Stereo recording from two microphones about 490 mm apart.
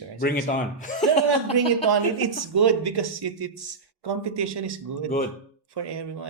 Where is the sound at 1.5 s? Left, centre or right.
Right.